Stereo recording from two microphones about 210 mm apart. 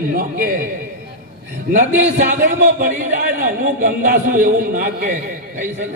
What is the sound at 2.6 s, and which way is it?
A man's voice, 35° right (ahead or behind).